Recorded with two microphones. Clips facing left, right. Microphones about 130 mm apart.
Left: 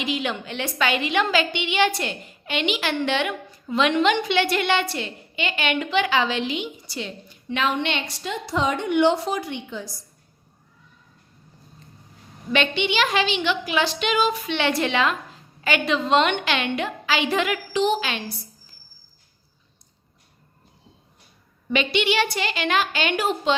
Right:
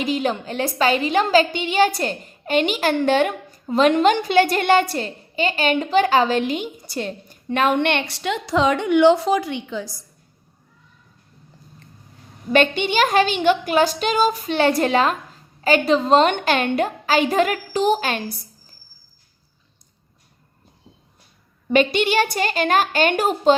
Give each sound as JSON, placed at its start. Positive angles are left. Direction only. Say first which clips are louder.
{"t": 0.0, "sound": "a woman's voice", "louder": "right 5 dB", "side_deg": -40}
{"t": 12.5, "sound": "a woman's voice", "louder": "right 5 dB", "side_deg": -45}
{"t": 21.7, "sound": "a woman's voice", "louder": "right 5 dB", "side_deg": -45}